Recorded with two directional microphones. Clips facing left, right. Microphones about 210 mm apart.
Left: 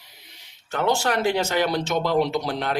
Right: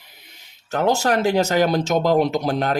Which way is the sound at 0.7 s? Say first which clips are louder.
Right 4 dB; 40° right (ahead or behind).